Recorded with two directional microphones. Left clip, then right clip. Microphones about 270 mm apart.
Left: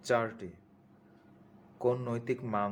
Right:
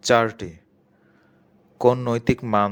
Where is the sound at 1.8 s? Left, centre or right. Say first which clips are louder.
Right 13 dB; right.